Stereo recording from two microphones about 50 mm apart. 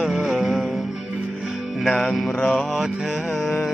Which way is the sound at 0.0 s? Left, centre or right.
Centre.